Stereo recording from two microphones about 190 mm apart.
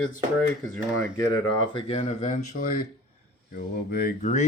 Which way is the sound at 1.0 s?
20° left (ahead or behind).